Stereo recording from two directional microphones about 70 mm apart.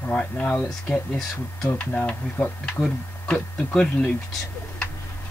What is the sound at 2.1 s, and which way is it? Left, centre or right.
Speech, centre.